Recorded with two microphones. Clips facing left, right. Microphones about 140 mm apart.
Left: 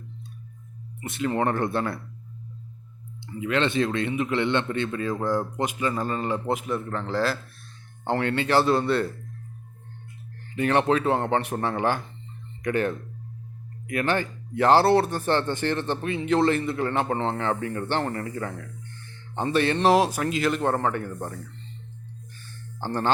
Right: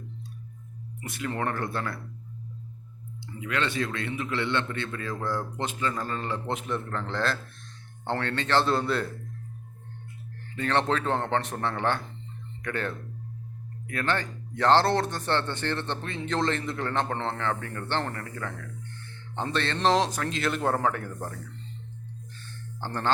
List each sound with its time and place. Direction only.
1.0 s speech: 25° left (ahead or behind)
3.4 s speech: 25° left (ahead or behind); by 9.0 s centre (ahead or behind)
10.5 s speech: 15° left (ahead or behind)
22.4 s a sound: 10° left (ahead or behind)